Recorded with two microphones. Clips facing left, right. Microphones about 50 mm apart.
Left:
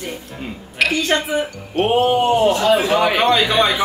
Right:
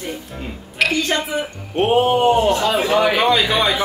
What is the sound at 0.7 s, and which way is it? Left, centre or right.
Speech, centre.